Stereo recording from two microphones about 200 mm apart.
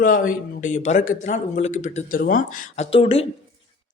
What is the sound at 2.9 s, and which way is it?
Speech, 30° left (ahead or behind).